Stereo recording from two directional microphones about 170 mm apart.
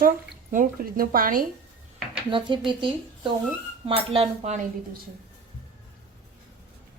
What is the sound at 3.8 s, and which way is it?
Speech, 35° right (ahead or behind).